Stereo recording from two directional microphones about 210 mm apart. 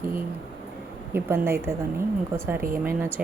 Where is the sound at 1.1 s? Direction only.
10° right (ahead or behind).